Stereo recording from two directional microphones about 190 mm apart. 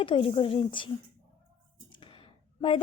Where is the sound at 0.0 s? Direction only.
25° left (ahead or behind).